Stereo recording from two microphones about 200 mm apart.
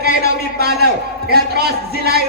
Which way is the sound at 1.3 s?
50° right (ahead or behind).